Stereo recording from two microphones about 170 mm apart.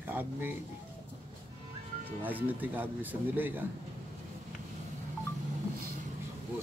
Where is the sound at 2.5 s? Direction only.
10° right (ahead or behind).